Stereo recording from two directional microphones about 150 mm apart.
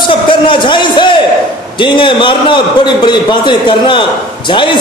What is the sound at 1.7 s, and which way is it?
A man's voice, 35° left (ahead or behind).